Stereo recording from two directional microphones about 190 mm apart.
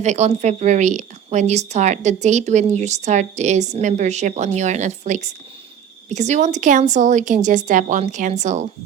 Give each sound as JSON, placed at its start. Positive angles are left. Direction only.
{"t": 0.0, "sound": "a woman's voice", "side_deg": -40}